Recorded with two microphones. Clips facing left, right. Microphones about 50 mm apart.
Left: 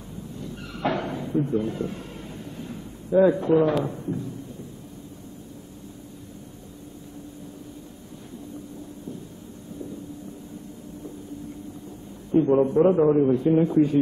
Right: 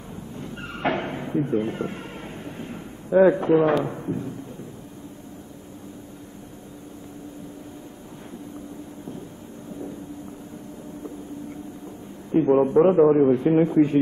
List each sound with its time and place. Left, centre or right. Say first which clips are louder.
0.4 s vehicle: right 1 dB; right
3.8 s a man's voice: right 1 dB; right
12.3 s a man's voice: right 1 dB; right